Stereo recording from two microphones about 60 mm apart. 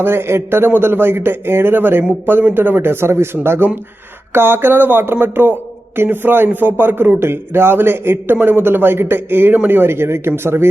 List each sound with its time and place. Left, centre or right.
0.0 s speech: right